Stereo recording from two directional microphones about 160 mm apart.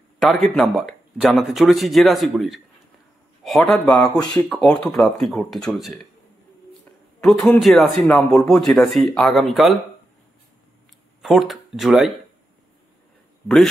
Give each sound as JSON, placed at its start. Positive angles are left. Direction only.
{"t": 0.2, "sound": "speech", "side_deg": 0}
{"t": 7.2, "sound": "speech", "side_deg": 0}
{"t": 11.2, "sound": "speech", "side_deg": 0}